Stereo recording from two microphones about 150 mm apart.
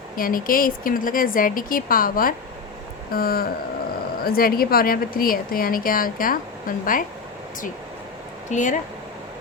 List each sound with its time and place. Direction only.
0.2 s a woman's voice: 70° left (ahead or behind)
8.4 s speech: 55° left (ahead or behind)